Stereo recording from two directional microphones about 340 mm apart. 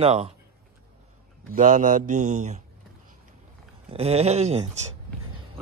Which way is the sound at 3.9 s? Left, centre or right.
Centre.